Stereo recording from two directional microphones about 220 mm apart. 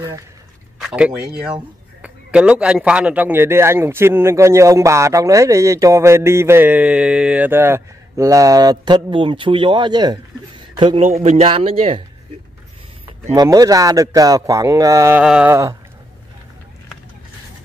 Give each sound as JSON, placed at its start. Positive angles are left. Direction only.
{"t": 0.7, "sound": "a man's voice", "side_deg": -5}
{"t": 13.3, "sound": "a man's voice", "side_deg": -15}